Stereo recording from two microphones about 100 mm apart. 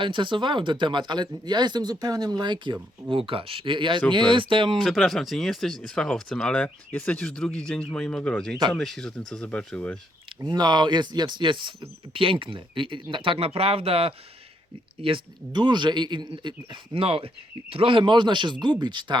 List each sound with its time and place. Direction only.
0.0 s speech: 55° right (ahead or behind)
3.1 s speech: 60° right (ahead or behind)
4.8 s speech: centre (ahead or behind)
10.5 s speech: 45° right (ahead or behind); by 14.1 s 70° right (ahead or behind)
15.0 s speech: 55° right (ahead or behind)